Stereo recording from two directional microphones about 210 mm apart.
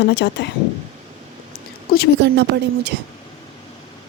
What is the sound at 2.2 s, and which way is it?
Speech, 55° right (ahead or behind).